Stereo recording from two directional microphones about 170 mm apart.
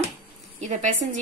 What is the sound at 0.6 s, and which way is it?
Speech, 45° right (ahead or behind).